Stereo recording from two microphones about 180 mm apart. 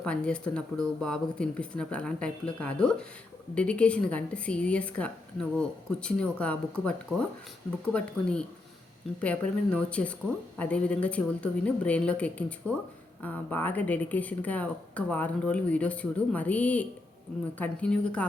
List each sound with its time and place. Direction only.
0.0 s a woman's voice: 5° left (ahead or behind)